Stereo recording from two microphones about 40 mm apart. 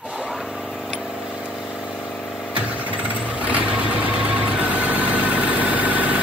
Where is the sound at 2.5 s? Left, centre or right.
Right.